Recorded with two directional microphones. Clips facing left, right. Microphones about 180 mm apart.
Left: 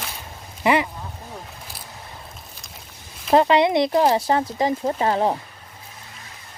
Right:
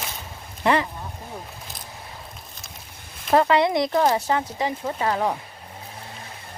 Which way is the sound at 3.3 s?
20° left (ahead or behind).